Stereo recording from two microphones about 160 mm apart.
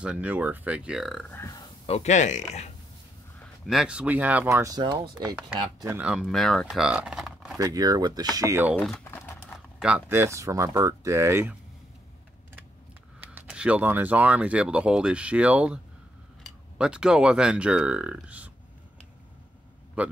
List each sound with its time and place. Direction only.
0.0 s speech: 10° right (ahead or behind)
1.3 s speech: 20° left (ahead or behind)
1.9 s speech: 45° left (ahead or behind)
3.6 s speech: 5° right (ahead or behind); by 5.9 s 25° right (ahead or behind)
5.9 s speech: 5° right (ahead or behind)
7.5 s speech: 20° right (ahead or behind)
8.7 s speech: 10° left (ahead or behind)
9.8 s speech: 5° right (ahead or behind)
13.2 s speech: 10° right (ahead or behind)
20.0 s speech: 10° right (ahead or behind)